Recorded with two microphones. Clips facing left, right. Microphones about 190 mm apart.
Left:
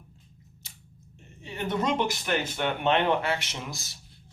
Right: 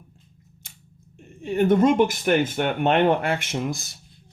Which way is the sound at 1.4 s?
50° right (ahead or behind).